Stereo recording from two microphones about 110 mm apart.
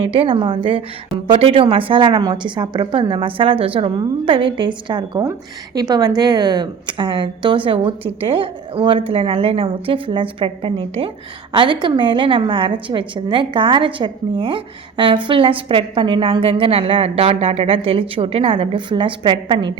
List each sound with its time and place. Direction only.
0.0 s a woman's voice: 55° right (ahead or behind)
5.2 s a woman's voice: 30° right (ahead or behind); by 11.1 s 60° right (ahead or behind)
11.5 s a woman's voice: 50° right (ahead or behind)